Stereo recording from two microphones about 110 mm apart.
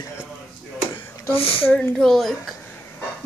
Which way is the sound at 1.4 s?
55° left (ahead or behind).